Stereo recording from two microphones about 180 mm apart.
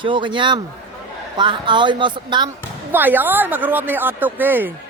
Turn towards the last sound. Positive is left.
turn(degrees=-10)  # may be behind; listen again after turning